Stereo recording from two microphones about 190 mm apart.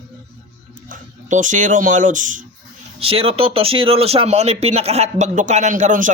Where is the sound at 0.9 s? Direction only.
40° right (ahead or behind).